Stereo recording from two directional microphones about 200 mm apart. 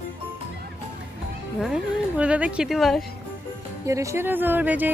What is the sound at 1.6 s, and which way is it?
Speech, 5° right (ahead or behind).